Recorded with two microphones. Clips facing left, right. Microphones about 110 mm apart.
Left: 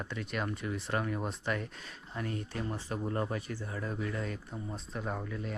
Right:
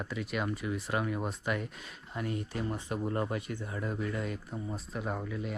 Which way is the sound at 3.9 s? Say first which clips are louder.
Right 2 dB; 5° right (ahead or behind).